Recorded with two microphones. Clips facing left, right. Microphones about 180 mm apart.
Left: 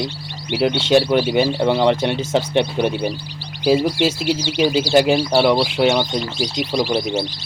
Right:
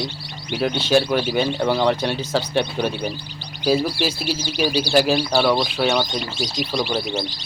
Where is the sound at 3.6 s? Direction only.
15° left (ahead or behind).